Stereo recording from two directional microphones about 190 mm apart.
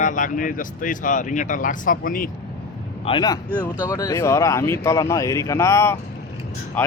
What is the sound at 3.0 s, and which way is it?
Speech, 25° left (ahead or behind).